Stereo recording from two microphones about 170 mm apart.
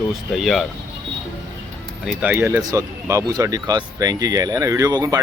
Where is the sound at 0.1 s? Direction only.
Centre (ahead or behind).